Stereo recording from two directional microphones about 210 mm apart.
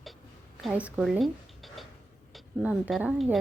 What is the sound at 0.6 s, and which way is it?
Speech, 5° right (ahead or behind).